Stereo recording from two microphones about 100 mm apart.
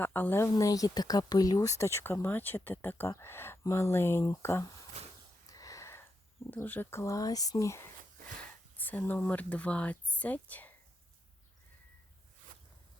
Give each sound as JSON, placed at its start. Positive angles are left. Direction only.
{"t": 0.0, "sound": "speech", "side_deg": 20}
{"t": 0.5, "sound": "speech", "side_deg": 35}
{"t": 4.9, "sound": "a sound", "side_deg": -90}
{"t": 5.5, "sound": "a sound", "side_deg": 35}
{"t": 6.6, "sound": "speech", "side_deg": 20}
{"t": 7.0, "sound": "speech", "side_deg": 35}
{"t": 8.7, "sound": "speech", "side_deg": 15}